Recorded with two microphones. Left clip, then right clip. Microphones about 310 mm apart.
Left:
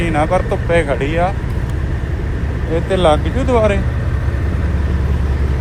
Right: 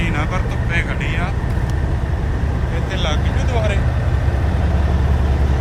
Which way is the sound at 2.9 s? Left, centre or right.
Centre.